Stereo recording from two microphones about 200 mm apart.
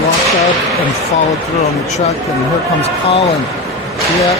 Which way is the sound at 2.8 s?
30° left (ahead or behind).